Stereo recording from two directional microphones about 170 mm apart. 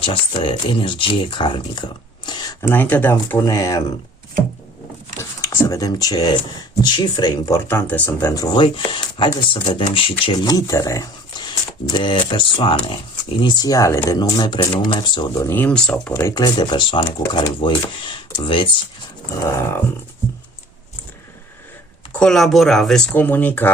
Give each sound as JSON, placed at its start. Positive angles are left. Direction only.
{"t": 0.0, "sound": "speech", "side_deg": 30}
{"t": 5.4, "sound": "speech", "side_deg": 15}
{"t": 15.4, "sound": "speech", "side_deg": 10}
{"t": 16.1, "sound": "speech", "side_deg": 20}
{"t": 19.4, "sound": "speech", "side_deg": 15}
{"t": 22.2, "sound": "speech", "side_deg": 0}